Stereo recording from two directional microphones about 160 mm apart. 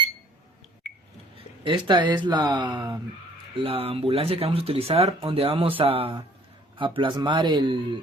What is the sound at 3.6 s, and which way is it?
Speech, 35° right (ahead or behind).